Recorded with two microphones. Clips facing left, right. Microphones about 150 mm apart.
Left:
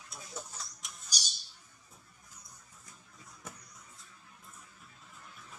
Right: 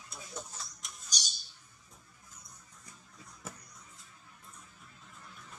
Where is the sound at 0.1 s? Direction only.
Centre (ahead or behind).